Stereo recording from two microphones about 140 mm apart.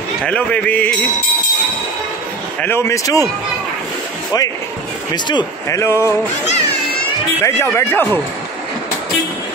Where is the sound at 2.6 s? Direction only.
20° left (ahead or behind).